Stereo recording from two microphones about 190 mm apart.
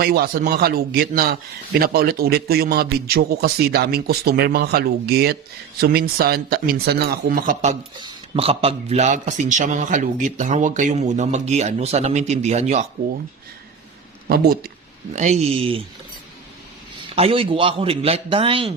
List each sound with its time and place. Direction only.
0.0 s a man's voice: 50° right (ahead or behind)
7.9 s a man's voice: 25° right (ahead or behind)
14.3 s speech: 50° right (ahead or behind)
15.1 s a man's voice: 40° right (ahead or behind)
17.0 s a man's voice: 30° right (ahead or behind)